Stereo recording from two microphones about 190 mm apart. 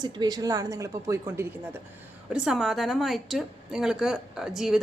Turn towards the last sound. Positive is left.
turn(degrees=0)  # may be behind; listen again after turning